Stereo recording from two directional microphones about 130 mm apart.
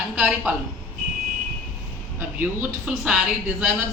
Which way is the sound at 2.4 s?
10° right (ahead or behind).